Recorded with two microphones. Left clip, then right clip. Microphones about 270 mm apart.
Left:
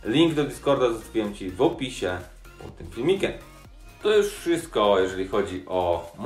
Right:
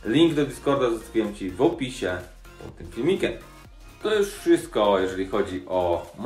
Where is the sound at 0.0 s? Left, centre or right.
Centre.